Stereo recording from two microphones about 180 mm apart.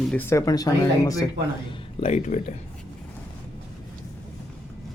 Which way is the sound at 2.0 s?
40° left (ahead or behind).